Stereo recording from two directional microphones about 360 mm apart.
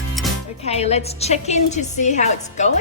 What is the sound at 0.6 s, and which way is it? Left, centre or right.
A woman's voice, centre.